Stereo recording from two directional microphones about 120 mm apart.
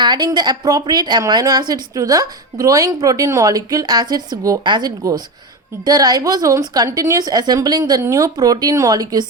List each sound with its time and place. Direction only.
0.0 s a woman's voice: 35° right (ahead or behind)